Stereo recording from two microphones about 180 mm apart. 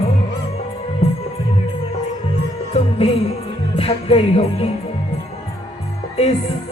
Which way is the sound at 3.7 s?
30° left (ahead or behind).